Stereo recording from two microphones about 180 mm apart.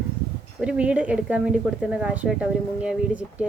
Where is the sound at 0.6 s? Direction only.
5° right (ahead or behind).